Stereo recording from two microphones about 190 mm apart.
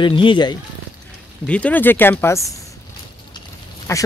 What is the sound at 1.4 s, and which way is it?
Speech, 5° left (ahead or behind).